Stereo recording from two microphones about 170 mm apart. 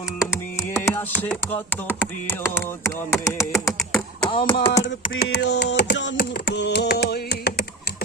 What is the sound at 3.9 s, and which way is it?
Beatboxing, 5° left (ahead or behind).